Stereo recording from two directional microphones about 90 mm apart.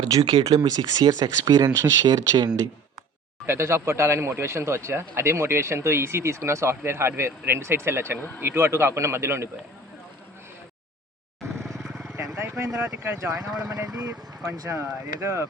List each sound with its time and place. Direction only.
0.2 s speech: 65° right (ahead or behind); by 2.6 s 45° right (ahead or behind)
3.4 s speech: 30° right (ahead or behind)
11.8 s vehicle: centre (ahead or behind)
12.4 s speech: 35° right (ahead or behind)